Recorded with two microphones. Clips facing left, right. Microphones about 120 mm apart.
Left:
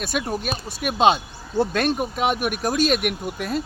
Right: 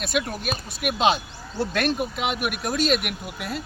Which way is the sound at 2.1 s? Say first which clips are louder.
Left 4 dB; 45° left (ahead or behind).